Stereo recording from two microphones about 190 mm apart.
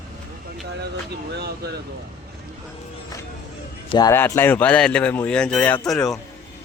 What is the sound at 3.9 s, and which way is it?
Speech, 20° left (ahead or behind).